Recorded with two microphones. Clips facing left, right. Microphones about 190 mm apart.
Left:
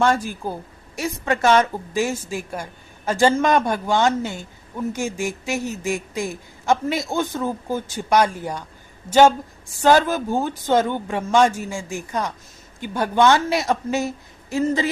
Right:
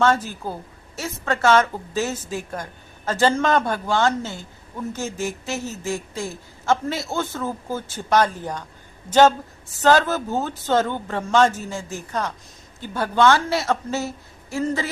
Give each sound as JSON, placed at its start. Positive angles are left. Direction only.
{"t": 0.0, "sound": "a woman's voice", "side_deg": 10}